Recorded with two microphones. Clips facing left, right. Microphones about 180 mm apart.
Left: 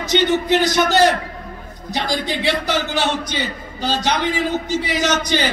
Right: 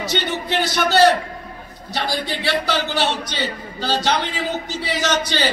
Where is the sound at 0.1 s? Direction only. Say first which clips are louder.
Left 9 dB; 20° left (ahead or behind).